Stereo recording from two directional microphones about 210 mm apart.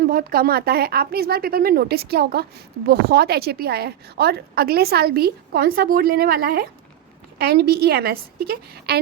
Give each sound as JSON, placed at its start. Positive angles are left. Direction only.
{"t": 0.0, "sound": "speech", "side_deg": -45}